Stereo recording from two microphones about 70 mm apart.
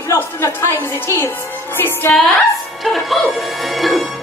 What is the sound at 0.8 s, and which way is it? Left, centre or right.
A woman's voice, left.